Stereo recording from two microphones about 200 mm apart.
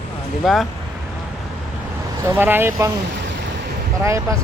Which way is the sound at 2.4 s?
10° right (ahead or behind).